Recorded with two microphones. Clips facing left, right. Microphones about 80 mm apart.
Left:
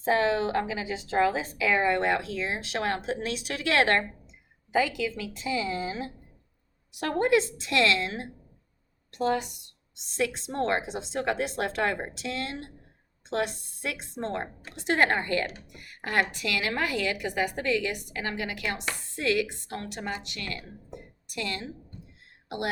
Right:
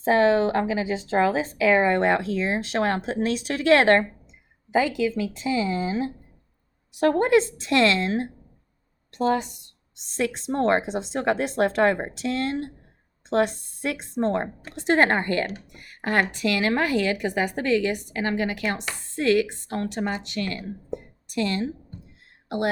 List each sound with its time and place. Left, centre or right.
0.0 s a woman's voice: right